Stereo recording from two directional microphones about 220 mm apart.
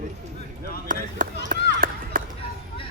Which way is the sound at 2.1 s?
40° right (ahead or behind).